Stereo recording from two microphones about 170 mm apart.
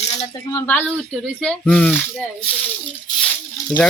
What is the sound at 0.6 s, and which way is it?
Speech, 10° left (ahead or behind).